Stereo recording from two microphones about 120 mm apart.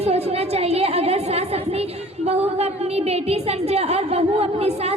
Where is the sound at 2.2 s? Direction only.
60° right (ahead or behind).